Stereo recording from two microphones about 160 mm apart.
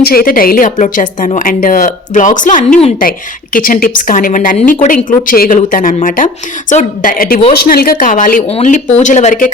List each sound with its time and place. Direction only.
0.0 s a woman's voice: 70° left (ahead or behind)
7.6 s a woman's voice: 70° left (ahead or behind); by 8.4 s 55° left (ahead or behind)
8.4 s speech: 45° left (ahead or behind)